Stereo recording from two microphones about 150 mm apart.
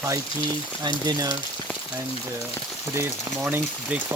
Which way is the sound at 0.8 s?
30° right (ahead or behind).